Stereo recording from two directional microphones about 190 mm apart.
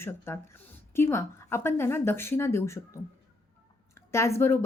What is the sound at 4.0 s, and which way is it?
Speech, 15° left (ahead or behind).